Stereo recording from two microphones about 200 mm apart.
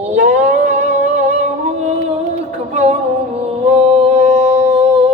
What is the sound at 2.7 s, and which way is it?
Music, 35° right (ahead or behind).